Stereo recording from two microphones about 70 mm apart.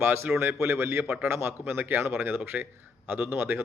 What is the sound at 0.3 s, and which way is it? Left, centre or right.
Speech, right.